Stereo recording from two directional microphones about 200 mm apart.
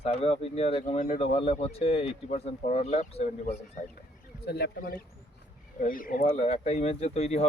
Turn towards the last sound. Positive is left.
turn(degrees=30)  # may be behind; listen again after turning